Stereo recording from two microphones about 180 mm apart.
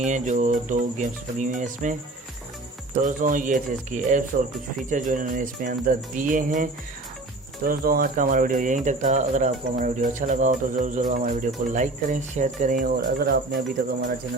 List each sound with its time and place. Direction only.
0.0 s speech: 45° right (ahead or behind); by 13.6 s 60° right (ahead or behind)